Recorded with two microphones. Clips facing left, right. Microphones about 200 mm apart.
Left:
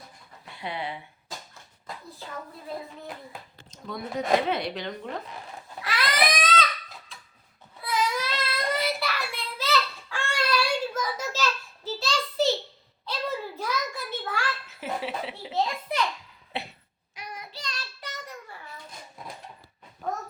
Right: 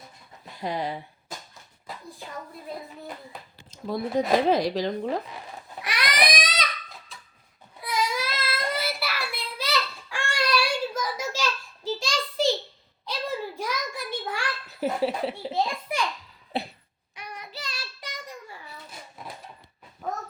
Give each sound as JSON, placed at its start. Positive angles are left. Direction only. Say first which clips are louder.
{"t": 0.5, "sound": "a woman's voice", "louder": "right 4 dB", "side_deg": -40}
{"t": 3.8, "sound": "a woman's voice", "louder": "right 4 dB", "side_deg": -30}
{"t": 5.8, "sound": "baby cry", "louder": "even", "side_deg": -15}
{"t": 7.8, "sound": "child singing", "louder": "even", "side_deg": -10}
{"t": 11.9, "sound": "a sound", "louder": "left 4 dB", "side_deg": -15}
{"t": 14.7, "sound": "a sound", "louder": "right 6 dB", "side_deg": -40}
{"t": 15.5, "sound": "a sound", "louder": "left 4 dB", "side_deg": -10}
{"t": 16.5, "sound": "throat clearing", "louder": "right 5 dB", "side_deg": -35}
{"t": 17.3, "sound": "child singing", "louder": "right 1 dB", "side_deg": 0}
{"t": 20.0, "sound": "dog", "louder": "left 1 dB", "side_deg": -5}